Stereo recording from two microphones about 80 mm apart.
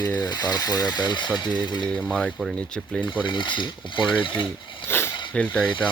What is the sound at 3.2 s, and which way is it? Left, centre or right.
Speech, left.